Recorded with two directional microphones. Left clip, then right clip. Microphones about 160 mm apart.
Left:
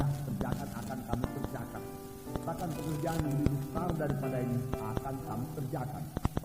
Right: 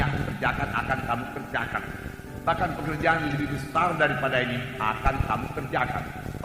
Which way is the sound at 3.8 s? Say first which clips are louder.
Right 13 dB; 40° left (ahead or behind).